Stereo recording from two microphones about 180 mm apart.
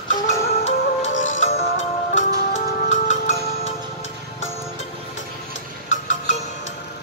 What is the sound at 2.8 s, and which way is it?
Music, 45° left (ahead or behind).